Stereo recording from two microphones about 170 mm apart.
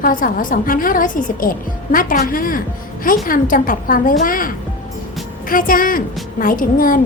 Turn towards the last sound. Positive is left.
turn(degrees=55)  # may be behind; listen again after turning